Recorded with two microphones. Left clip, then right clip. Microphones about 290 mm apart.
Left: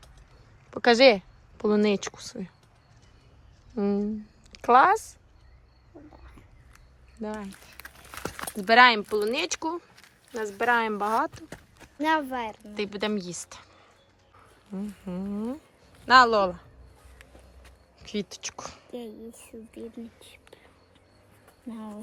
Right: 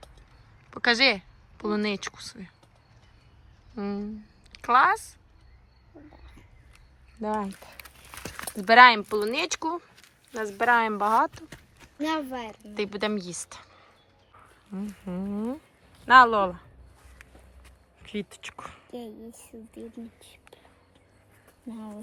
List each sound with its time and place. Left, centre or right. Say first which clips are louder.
0.7 s a woman's voice: left 4 dB; centre
3.8 s speech: left 6 dB; centre
5.9 s cricket: left 1 dB; centre
7.2 s a woman's voice: right 6 dB; centre
7.8 s a sound: left 9 dB; left
8.3 s a woman's voice: right 2 dB; centre
11.4 s livestock: left 2 dB; left
11.9 s speech: left 4 dB; centre
18.1 s a woman's voice: left 2 dB; centre
21.7 s a woman's voice: left 1 dB; centre